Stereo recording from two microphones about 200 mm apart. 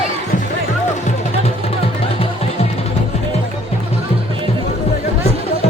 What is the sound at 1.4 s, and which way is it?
Music, 30° left (ahead or behind).